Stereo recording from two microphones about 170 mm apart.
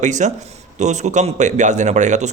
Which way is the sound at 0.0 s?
45° right (ahead or behind).